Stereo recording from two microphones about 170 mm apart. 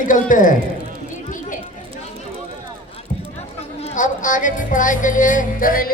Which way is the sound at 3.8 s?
50° left (ahead or behind).